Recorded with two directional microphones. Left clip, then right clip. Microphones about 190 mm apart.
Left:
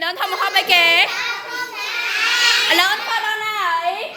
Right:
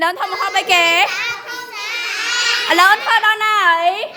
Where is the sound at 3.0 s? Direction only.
65° right (ahead or behind).